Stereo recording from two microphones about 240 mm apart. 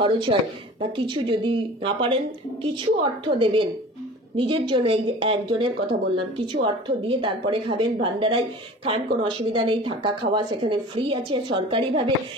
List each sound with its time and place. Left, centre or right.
0.0 s a woman's voice: right